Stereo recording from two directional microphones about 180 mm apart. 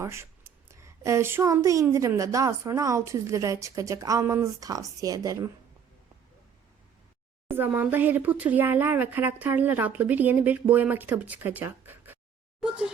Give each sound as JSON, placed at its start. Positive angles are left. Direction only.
{"t": 0.0, "sound": "speech", "side_deg": -15}
{"t": 7.5, "sound": "speech", "side_deg": -10}